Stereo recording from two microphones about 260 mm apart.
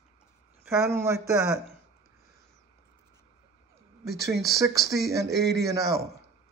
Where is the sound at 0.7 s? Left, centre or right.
Centre.